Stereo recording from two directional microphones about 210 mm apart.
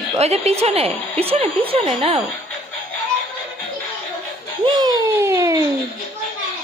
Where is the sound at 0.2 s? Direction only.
30° right (ahead or behind).